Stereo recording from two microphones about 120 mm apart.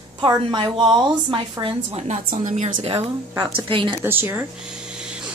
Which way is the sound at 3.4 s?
45° right (ahead or behind).